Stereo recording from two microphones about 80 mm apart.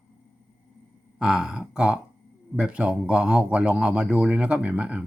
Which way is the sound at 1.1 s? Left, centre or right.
Centre.